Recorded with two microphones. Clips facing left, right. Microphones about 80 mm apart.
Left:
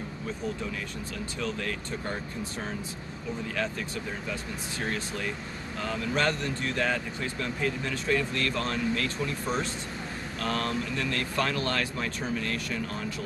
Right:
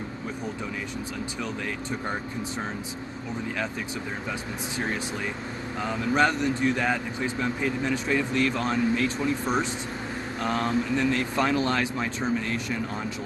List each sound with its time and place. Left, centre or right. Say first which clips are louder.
5.8 s speech: right 5 dB; centre